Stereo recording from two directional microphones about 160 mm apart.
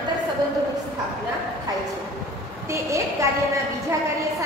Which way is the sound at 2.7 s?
20° right (ahead or behind).